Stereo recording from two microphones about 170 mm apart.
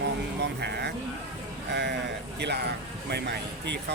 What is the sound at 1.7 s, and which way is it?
Speech, 90° right.